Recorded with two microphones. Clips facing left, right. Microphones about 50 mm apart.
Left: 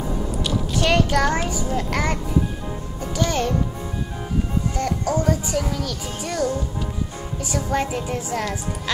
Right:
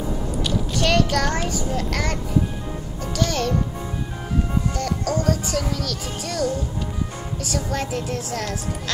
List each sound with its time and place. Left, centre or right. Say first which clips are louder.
0.4 s a sound: even; centre
3.0 s a child's voice: left 1 dB; centre
4.7 s speech: left 4 dB; centre